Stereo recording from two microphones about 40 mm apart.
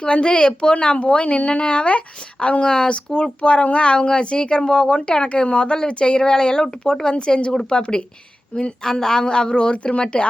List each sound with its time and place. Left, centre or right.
0.0 s a woman's voice: left
8.8 s a woman's voice: centre